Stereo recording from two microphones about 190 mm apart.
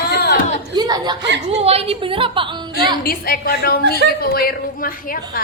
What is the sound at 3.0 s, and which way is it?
A woman's voice, 50° left (ahead or behind).